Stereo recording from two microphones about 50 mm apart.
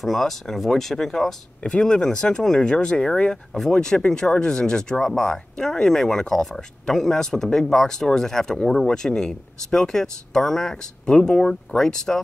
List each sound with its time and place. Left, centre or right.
0.0 s speech: centre